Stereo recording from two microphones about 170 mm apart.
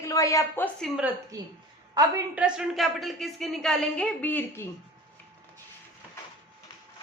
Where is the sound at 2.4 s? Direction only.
5° right (ahead or behind); by 4.7 s 10° left (ahead or behind).